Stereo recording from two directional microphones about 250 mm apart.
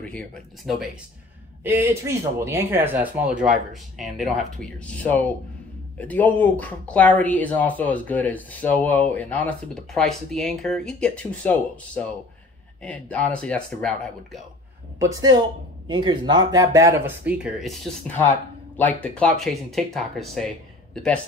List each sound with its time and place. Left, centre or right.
0.0 s speech: centre
1.6 s speech: centre
15.1 s speech: centre